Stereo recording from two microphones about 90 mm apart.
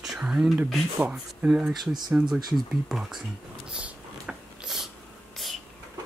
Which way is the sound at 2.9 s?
5° right (ahead or behind).